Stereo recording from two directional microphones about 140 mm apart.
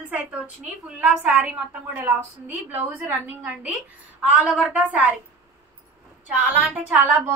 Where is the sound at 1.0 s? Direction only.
10° right (ahead or behind).